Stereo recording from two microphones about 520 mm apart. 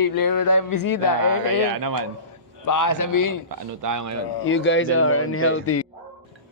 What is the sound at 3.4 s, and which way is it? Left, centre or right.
Speech, right.